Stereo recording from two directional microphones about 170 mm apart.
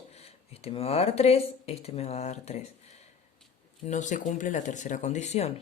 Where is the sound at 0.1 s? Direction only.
35° left (ahead or behind).